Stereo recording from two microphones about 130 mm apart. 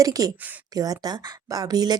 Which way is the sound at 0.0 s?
30° right (ahead or behind).